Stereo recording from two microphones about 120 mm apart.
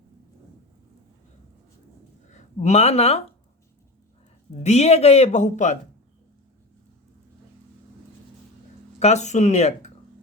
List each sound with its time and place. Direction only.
2.3 s speech: 75° left (ahead or behind)
4.6 s a man's voice: 65° left (ahead or behind); by 5.7 s 80° left
9.0 s speech: 65° left (ahead or behind)